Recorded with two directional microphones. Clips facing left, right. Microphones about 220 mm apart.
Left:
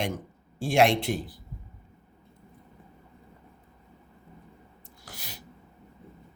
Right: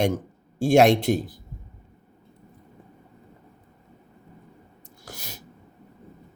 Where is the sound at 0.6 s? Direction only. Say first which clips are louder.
Right 6 dB; 45° right (ahead or behind).